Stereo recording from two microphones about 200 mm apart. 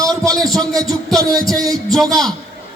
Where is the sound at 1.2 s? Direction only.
15° right (ahead or behind).